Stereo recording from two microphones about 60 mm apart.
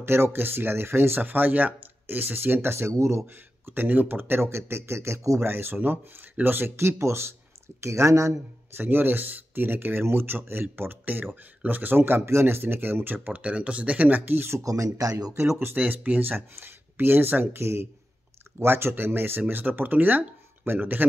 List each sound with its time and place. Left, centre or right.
0.0 s speech: right
3.0 s speech: right
3.7 s speech: right
5.4 s speech: right
8.7 s speech: right
14.6 s speech: right
15.6 s speech: right